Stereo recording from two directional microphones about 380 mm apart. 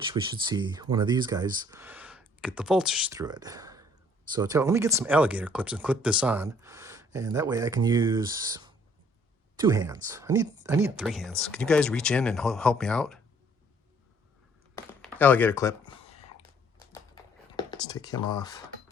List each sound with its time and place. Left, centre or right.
0.0 s speech: centre
14.8 s speech: centre
15.9 s a sound: centre
17.6 s speech: centre